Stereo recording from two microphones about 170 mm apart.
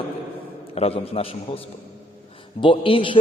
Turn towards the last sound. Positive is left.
turn(degrees=30)  # may be behind; listen again after turning